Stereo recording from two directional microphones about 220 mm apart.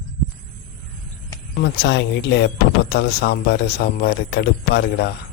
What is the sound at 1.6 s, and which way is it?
Speech, 50° left (ahead or behind).